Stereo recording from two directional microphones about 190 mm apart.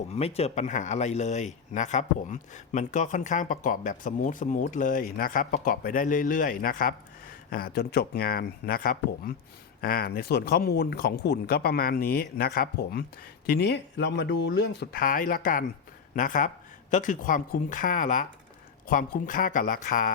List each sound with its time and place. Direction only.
0.1 s speech: 35° left (ahead or behind)